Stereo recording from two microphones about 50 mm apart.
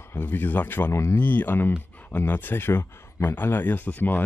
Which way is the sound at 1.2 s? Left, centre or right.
Left.